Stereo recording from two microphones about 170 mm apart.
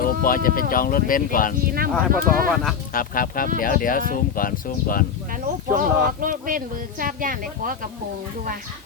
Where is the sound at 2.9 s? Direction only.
55° left (ahead or behind).